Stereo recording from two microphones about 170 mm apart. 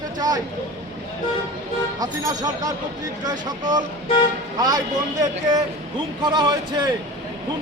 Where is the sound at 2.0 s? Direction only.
20° right (ahead or behind).